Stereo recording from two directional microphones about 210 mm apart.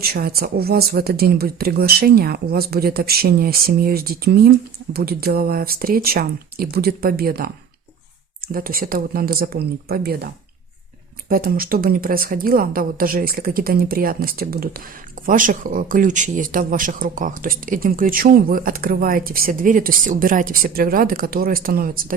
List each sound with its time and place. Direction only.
0.0 s speech: 45° right (ahead or behind)
8.5 s speech: 45° right (ahead or behind)
11.3 s speech: 45° right (ahead or behind)